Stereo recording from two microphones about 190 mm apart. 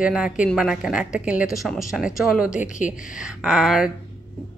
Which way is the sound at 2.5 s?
40° left (ahead or behind).